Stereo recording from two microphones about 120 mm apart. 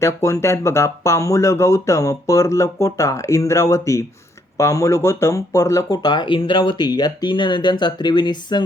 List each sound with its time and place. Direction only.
0.0 s speech: 25° left (ahead or behind)